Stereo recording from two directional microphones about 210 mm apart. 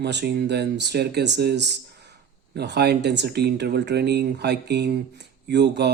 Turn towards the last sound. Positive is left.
turn(degrees=-55)  # may be behind; listen again after turning